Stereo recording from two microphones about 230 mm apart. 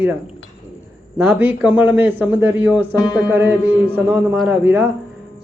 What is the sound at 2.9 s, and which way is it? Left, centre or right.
Speech, centre.